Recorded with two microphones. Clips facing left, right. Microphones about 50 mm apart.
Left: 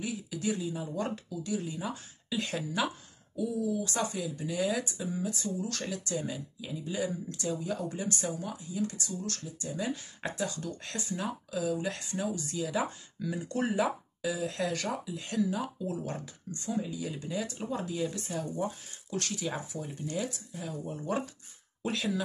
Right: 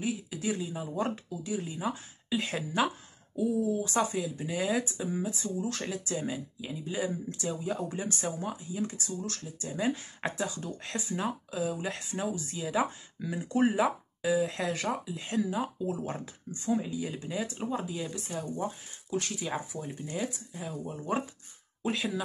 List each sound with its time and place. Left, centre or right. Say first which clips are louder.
0.0 s speech: right 1 dB; centre
3.3 s speech: right 3 dB; right
3.8 s speech: right 3 dB; centre
8.2 s speech: right 1 dB; right; by 14.9 s centre
14.9 s speech: right 2 dB; right
17.0 s speech: right 1 dB; centre